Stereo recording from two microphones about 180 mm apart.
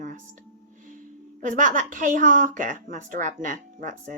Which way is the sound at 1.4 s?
45° right (ahead or behind).